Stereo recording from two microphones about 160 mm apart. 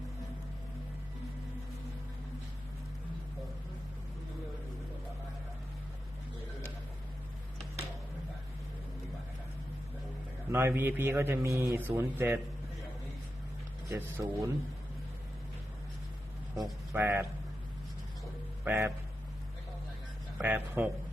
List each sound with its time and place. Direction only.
10.5 s a man's voice: 15° right (ahead or behind)
13.8 s speech: 20° right (ahead or behind)
16.9 s a man's voice: 15° right (ahead or behind)
18.6 s a man's voice: 15° right (ahead or behind)
20.4 s a man's voice: 10° right (ahead or behind)